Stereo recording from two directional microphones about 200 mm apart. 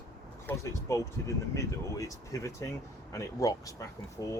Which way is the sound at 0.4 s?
15° left (ahead or behind).